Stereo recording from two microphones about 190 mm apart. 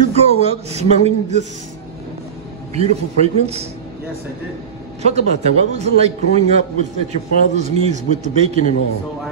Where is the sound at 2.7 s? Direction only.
35° right (ahead or behind).